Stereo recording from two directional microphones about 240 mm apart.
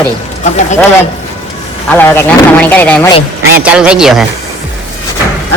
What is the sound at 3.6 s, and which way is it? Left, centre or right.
Speech, centre.